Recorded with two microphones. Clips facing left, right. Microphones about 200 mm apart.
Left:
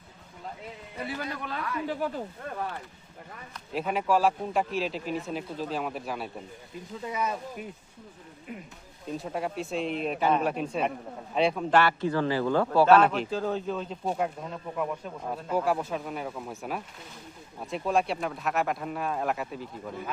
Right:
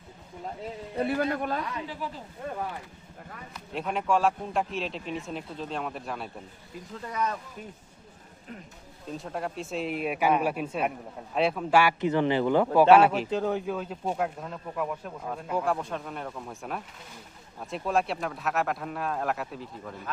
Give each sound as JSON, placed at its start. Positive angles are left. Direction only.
{"t": 1.0, "sound": "speech", "side_deg": -55}
{"t": 1.9, "sound": "speech", "side_deg": 50}
{"t": 3.5, "sound": "speech", "side_deg": 0}
{"t": 9.1, "sound": "a man's voice", "side_deg": 0}